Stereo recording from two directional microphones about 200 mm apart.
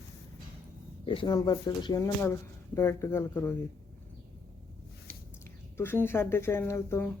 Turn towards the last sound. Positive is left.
turn(degrees=15)  # may be behind; listen again after turning